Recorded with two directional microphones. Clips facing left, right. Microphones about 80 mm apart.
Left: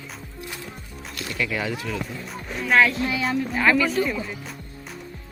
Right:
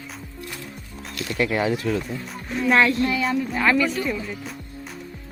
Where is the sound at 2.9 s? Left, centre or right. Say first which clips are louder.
Right 4 dB; centre.